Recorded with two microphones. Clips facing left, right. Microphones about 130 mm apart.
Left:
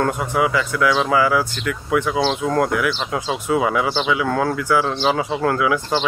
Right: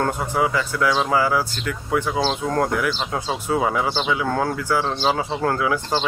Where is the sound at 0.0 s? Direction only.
35° right (ahead or behind).